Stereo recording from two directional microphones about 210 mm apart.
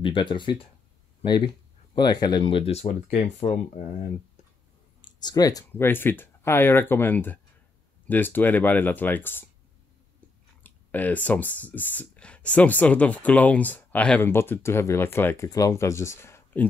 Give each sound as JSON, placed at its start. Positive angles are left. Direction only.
{"t": 0.0, "sound": "speech", "side_deg": 20}
{"t": 5.0, "sound": "speech", "side_deg": 20}
{"t": 10.6, "sound": "speech", "side_deg": 10}